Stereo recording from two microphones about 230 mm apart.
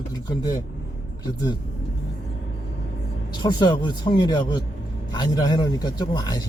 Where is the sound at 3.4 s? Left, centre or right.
Centre.